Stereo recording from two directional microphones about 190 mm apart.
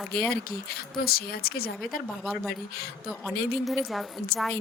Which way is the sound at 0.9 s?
50° left (ahead or behind).